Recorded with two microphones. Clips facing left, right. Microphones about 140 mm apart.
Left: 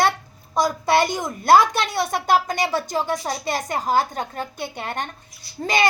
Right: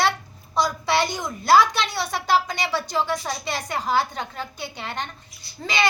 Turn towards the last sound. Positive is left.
turn(degrees=45)  # may be behind; listen again after turning